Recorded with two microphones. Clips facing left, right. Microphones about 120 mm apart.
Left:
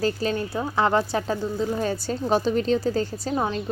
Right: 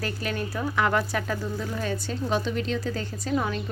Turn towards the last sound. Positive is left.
turn(degrees=30)  # may be behind; listen again after turning